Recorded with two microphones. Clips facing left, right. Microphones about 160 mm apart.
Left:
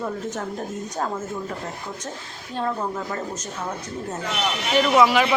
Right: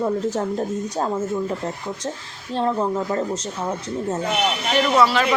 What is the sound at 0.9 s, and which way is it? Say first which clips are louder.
Speech: right 4 dB; 30° right (ahead or behind).